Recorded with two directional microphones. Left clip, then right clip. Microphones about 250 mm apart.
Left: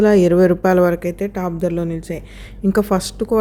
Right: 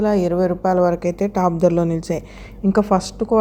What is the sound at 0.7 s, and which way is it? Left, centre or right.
Speech, left.